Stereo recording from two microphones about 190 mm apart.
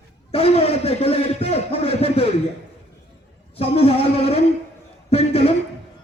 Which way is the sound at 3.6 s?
30° left (ahead or behind).